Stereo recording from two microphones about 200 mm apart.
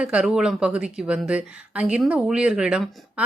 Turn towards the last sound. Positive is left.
turn(degrees=-5)  # may be behind; listen again after turning